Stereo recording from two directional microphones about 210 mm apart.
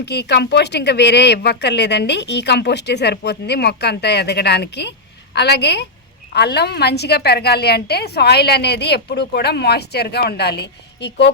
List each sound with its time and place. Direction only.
0.0 s speech: 55° left (ahead or behind)